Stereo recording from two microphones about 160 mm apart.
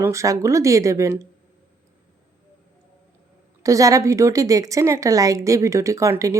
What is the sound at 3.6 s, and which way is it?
A woman's voice, 20° right (ahead or behind).